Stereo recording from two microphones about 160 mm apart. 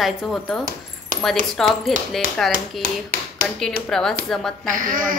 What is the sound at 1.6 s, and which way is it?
A woman's voice, centre (ahead or behind).